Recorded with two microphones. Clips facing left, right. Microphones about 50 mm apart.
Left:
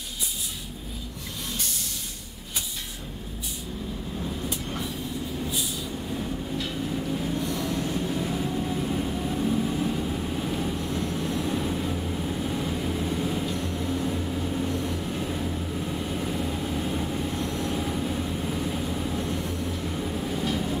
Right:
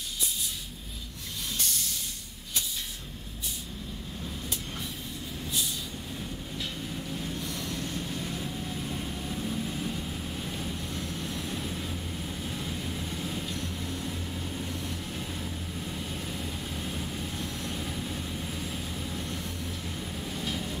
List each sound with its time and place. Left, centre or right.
1.6 s vehicle: centre
4.5 s vehicle: centre
6.6 s train: centre
11.6 s vehicle: centre